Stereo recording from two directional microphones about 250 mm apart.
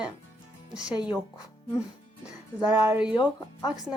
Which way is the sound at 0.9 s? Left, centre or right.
Centre.